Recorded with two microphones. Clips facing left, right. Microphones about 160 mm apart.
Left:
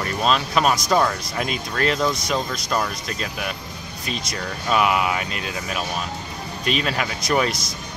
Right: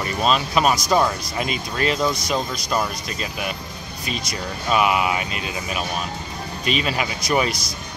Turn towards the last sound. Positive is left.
turn(degrees=-5)  # may be behind; listen again after turning